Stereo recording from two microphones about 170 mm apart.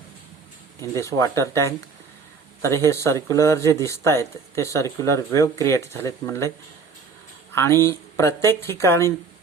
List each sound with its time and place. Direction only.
0.8 s speech: 15° left (ahead or behind)
7.5 s speech: 15° left (ahead or behind)